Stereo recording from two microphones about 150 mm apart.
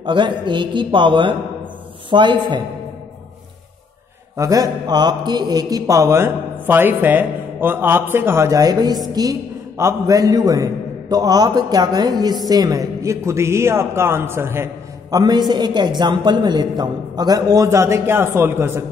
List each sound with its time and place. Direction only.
0.0 s a man's voice: 30° right (ahead or behind)
4.4 s speech: 25° right (ahead or behind)